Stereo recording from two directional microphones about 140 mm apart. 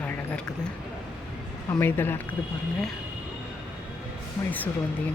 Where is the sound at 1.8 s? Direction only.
15° left (ahead or behind).